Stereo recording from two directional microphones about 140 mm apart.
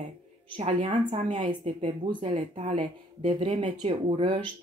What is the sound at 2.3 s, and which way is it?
Speech, 55° right (ahead or behind).